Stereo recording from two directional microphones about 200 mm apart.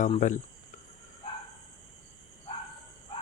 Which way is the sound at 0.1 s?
40° left (ahead or behind).